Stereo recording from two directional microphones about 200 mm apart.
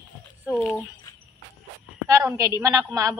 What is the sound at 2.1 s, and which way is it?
A woman's voice, 15° right (ahead or behind).